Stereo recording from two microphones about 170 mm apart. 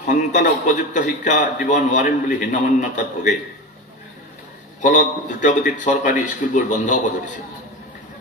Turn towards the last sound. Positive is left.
turn(degrees=45)  # may be behind; listen again after turning